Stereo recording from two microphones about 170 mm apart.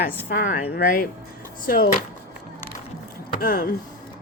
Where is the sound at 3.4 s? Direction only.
60° left (ahead or behind).